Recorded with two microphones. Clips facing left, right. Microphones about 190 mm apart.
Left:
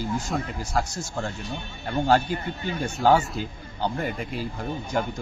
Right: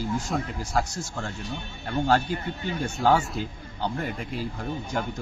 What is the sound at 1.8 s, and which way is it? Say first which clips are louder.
Speech: left 2 dB; 10° left (ahead or behind).